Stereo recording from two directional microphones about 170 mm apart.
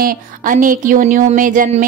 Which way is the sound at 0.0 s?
55° right (ahead or behind).